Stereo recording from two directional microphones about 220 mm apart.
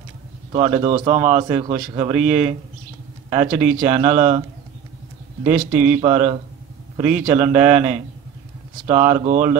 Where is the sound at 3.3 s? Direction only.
35° right (ahead or behind).